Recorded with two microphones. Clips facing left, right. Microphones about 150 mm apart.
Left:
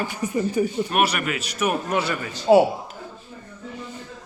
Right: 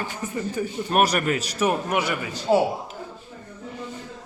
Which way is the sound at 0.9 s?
40° right (ahead or behind).